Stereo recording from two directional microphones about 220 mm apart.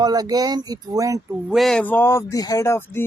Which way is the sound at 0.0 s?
15° right (ahead or behind).